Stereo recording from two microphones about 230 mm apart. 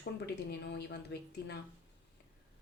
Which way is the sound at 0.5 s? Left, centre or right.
Left.